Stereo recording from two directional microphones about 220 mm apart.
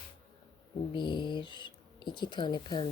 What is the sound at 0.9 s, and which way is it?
Speech, 20° left (ahead or behind).